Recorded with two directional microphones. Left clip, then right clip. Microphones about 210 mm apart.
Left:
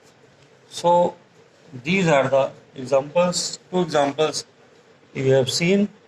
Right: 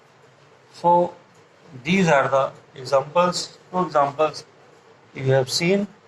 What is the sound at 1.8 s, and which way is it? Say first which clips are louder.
Speech: even; 10° left (ahead or behind).